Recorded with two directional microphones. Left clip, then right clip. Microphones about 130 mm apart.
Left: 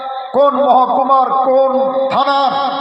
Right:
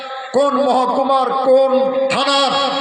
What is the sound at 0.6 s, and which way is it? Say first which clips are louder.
A man's voice: left 4 dB; 25° right (ahead or behind).